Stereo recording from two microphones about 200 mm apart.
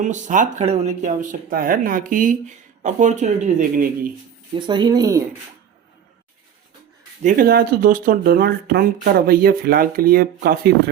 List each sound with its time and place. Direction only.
0.0 s speech: 40° right (ahead or behind)
4.6 s speech: 20° right (ahead or behind)
7.2 s speech: 45° right (ahead or behind)